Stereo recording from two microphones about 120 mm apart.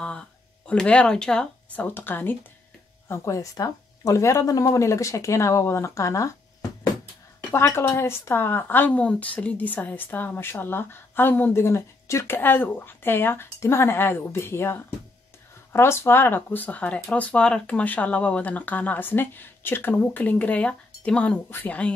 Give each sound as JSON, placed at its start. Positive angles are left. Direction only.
{"t": 0.0, "sound": "speech", "side_deg": 10}
{"t": 3.1, "sound": "speech", "side_deg": 25}
{"t": 7.5, "sound": "speech", "side_deg": 20}